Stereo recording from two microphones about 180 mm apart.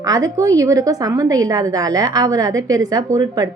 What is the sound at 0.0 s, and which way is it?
A woman's voice, 20° right (ahead or behind).